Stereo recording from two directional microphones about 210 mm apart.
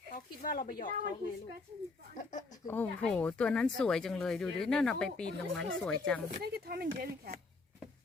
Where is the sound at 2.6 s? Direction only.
10° left (ahead or behind).